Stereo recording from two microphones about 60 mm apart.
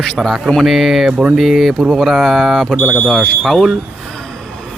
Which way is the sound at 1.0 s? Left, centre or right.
Centre.